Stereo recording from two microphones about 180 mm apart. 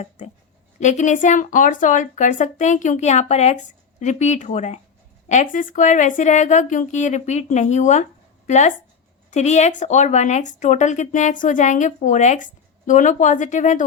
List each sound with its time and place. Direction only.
0.8 s speech: 40° left (ahead or behind)